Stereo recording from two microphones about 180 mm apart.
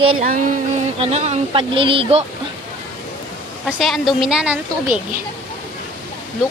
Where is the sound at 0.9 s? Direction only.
35° right (ahead or behind).